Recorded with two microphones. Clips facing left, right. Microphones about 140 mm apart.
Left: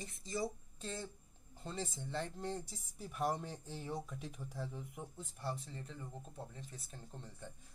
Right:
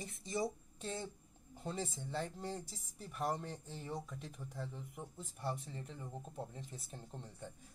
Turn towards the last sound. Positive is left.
turn(degrees=-20)  # may be behind; listen again after turning